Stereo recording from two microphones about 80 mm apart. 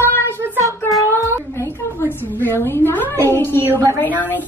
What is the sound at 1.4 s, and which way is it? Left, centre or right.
A woman's voice, left.